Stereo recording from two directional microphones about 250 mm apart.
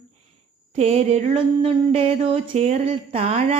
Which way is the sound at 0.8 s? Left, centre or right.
Right.